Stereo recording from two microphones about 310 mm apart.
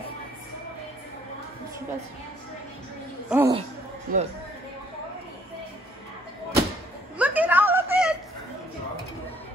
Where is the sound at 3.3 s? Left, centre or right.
Centre.